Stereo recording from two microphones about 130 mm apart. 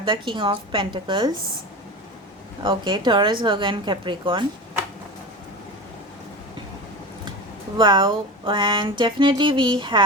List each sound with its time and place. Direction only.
0.0 s speech: 40° right (ahead or behind)
2.6 s speech: 35° right (ahead or behind)
7.8 s speech: 35° right (ahead or behind)